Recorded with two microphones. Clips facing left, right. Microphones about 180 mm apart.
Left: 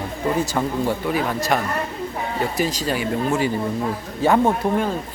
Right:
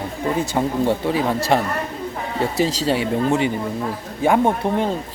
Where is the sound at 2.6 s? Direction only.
30° right (ahead or behind); by 4.5 s 15° right (ahead or behind).